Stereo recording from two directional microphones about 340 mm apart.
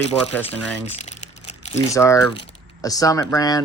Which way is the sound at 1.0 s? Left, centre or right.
Centre.